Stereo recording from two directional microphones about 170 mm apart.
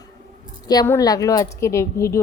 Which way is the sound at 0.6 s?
20° left (ahead or behind).